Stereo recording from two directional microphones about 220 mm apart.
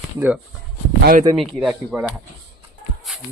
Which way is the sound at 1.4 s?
Centre (ahead or behind).